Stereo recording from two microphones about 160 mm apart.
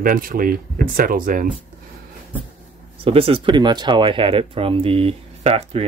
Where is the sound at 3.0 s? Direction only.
35° right (ahead or behind).